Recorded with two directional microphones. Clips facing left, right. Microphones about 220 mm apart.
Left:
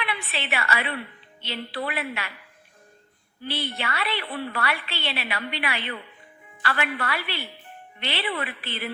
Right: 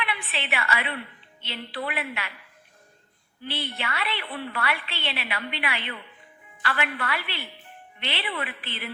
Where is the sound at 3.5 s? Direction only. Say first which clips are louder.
Left 2 dB; 40° left (ahead or behind).